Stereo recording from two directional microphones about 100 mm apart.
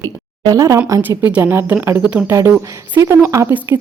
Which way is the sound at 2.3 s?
30° right (ahead or behind).